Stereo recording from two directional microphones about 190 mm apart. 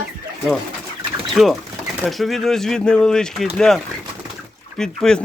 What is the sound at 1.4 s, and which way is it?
Speech, centre (ahead or behind).